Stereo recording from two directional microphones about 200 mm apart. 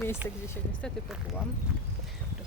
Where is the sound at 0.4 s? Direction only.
10° left (ahead or behind).